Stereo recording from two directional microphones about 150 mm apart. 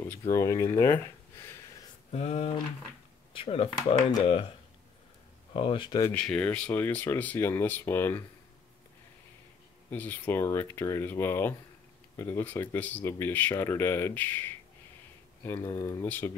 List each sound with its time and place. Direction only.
0.3 s speech: 20° left (ahead or behind)
2.0 s a sound: 45° left (ahead or behind)
3.3 s speech: 40° left (ahead or behind)
5.5 s speech: 40° left (ahead or behind)
6.0 s speech: 10° left (ahead or behind)
9.8 s speech: 10° left (ahead or behind)